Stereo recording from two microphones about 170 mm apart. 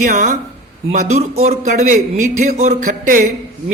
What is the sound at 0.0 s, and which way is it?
A man's voice, 45° right (ahead or behind).